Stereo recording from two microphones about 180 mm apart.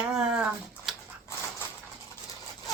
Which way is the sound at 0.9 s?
Centre (ahead or behind).